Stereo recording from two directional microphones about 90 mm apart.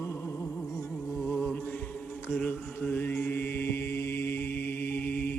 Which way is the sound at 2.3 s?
25° left (ahead or behind).